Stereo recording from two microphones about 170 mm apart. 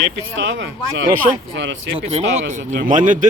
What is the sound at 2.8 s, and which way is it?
Speech, 50° right (ahead or behind).